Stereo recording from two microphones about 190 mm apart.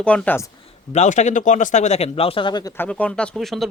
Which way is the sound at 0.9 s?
40° left (ahead or behind).